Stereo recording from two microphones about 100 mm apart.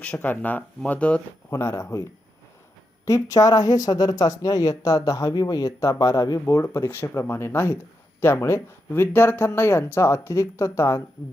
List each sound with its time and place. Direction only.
0.0 s speech: 15° left (ahead or behind)
1.5 s speech: 30° left (ahead or behind)
3.1 s speech: 35° left (ahead or behind)